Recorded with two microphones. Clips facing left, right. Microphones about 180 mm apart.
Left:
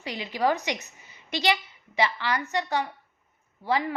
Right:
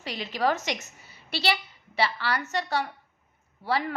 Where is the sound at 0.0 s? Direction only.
15° left (ahead or behind).